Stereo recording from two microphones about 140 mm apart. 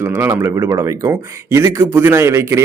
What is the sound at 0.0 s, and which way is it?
Speech, 15° right (ahead or behind).